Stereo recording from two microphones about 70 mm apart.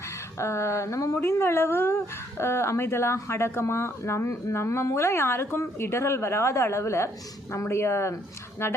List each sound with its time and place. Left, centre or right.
0.3 s speech: left
1.2 s speech: left